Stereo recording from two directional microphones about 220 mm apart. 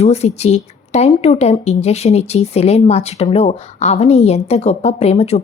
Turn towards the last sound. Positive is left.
turn(degrees=30)  # may be behind; listen again after turning